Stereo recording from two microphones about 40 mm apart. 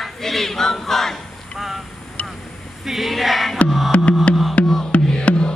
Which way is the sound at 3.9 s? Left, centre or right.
Left.